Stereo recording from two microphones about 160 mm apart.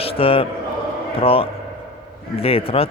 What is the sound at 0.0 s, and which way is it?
A man's voice, 35° left (ahead or behind).